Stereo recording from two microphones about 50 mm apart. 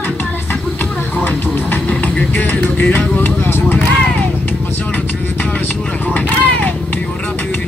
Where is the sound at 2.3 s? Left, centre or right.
Left.